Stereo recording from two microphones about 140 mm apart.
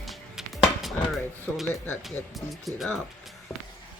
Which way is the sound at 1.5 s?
Centre (ahead or behind).